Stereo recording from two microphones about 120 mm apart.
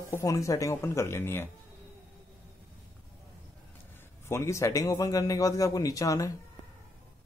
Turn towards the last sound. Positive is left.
turn(degrees=30)  # may be behind; listen again after turning